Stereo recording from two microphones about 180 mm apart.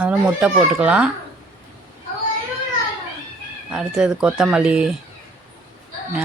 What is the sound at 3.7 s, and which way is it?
Speech, 5° right (ahead or behind).